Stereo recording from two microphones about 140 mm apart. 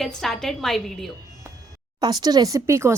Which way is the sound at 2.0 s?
30° right (ahead or behind).